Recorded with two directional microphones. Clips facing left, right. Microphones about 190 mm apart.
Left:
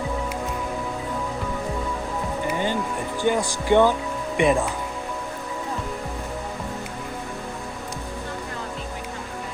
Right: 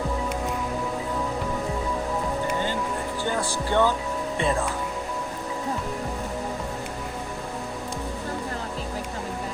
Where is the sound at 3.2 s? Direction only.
15° left (ahead or behind).